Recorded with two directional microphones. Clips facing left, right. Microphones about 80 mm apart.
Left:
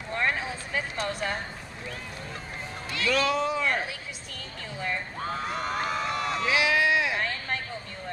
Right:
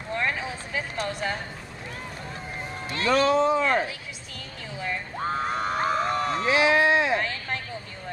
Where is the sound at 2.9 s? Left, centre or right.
Right.